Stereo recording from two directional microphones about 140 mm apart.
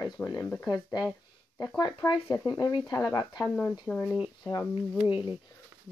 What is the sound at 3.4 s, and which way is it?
Speech, 10° left (ahead or behind).